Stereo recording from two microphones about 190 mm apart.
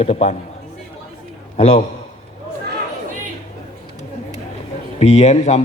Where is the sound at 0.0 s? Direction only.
30° left (ahead or behind).